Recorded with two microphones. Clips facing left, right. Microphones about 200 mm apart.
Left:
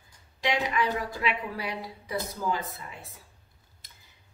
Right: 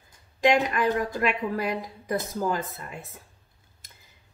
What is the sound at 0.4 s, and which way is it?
A woman's voice, 45° right (ahead or behind).